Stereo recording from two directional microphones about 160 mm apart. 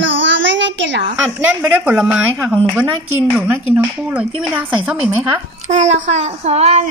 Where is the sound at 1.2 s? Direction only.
15° right (ahead or behind).